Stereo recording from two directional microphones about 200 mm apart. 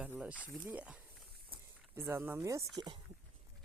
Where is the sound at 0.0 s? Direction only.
5° right (ahead or behind).